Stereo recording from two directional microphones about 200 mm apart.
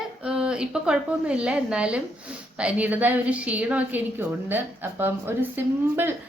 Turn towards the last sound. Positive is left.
turn(degrees=-10)  # may be behind; listen again after turning